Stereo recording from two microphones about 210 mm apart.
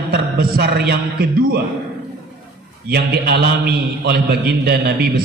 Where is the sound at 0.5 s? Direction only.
50° right (ahead or behind).